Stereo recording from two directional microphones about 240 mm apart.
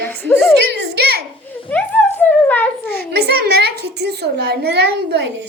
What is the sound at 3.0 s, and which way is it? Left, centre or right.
A child's voice, right.